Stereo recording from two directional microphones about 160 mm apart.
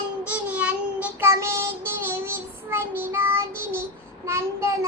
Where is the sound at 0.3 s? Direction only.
10° right (ahead or behind).